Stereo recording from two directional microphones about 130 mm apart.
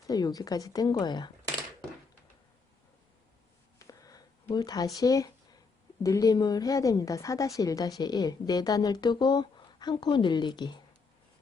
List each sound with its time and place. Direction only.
0.1 s a woman's voice: 30° left (ahead or behind)
3.8 s a sound: 25° left (ahead or behind)
4.9 s a woman's voice: 30° left (ahead or behind)